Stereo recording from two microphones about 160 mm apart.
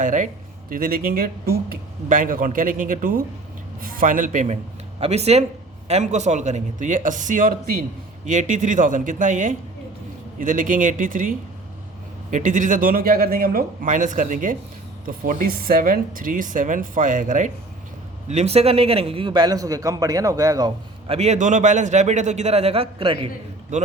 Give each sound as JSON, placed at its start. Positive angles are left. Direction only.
{"t": 0.0, "sound": "speech", "side_deg": -50}
{"t": 0.7, "sound": "speech", "side_deg": -65}
{"t": 4.9, "sound": "speech", "side_deg": -40}
{"t": 18.3, "sound": "a man's voice", "side_deg": -40}
{"t": 21.1, "sound": "speech", "side_deg": -45}
{"t": 23.7, "sound": "a man's voice", "side_deg": -50}